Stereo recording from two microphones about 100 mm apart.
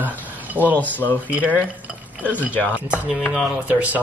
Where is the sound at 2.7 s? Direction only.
15° right (ahead or behind).